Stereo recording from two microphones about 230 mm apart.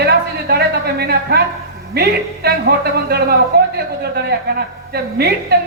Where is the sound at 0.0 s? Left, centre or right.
Right.